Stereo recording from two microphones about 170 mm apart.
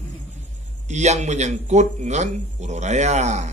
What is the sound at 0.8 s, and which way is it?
A man's voice, 40° right (ahead or behind).